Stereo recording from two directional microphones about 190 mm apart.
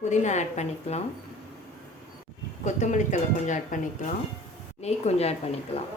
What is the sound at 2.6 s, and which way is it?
Speech, 40° left (ahead or behind).